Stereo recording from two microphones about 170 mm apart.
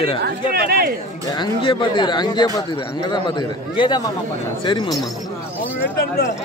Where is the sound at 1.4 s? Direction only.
30° left (ahead or behind).